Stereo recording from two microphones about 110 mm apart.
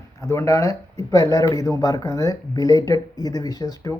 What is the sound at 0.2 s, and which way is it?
Speech, 25° left (ahead or behind).